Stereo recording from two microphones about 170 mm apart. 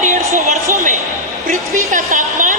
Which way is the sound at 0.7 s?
45° right (ahead or behind).